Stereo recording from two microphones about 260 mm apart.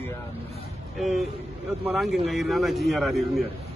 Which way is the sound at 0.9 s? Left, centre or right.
Centre.